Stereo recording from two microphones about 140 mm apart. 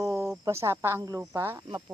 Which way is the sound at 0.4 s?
20° right (ahead or behind).